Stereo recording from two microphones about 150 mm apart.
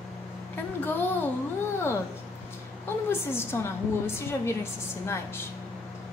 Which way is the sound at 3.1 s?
15° left (ahead or behind).